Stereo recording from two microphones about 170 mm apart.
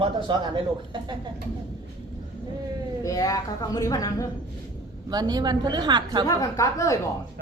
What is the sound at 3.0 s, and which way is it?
A woman's voice, 20° left (ahead or behind).